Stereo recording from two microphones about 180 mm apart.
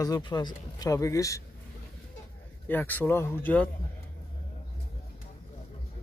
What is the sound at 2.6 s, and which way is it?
Speech, 10° left (ahead or behind).